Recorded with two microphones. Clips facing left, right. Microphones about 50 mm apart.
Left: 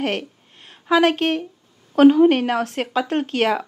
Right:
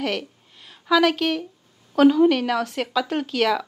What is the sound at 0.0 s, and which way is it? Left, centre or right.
A woman's voice, left.